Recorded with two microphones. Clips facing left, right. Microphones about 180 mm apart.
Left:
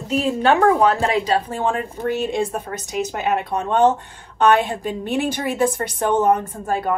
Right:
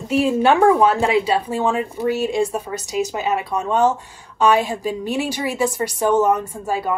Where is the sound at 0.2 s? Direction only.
10° right (ahead or behind).